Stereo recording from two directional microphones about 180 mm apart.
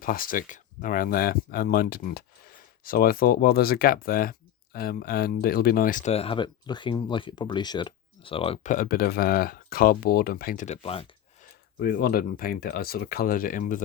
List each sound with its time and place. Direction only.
0.0 s speech: 50° left (ahead or behind); by 8.7 s 30° left (ahead or behind)
8.7 s speech: 50° left (ahead or behind)
11.8 s speech: 55° left (ahead or behind)